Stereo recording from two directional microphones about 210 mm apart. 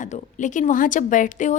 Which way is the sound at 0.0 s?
35° left (ahead or behind).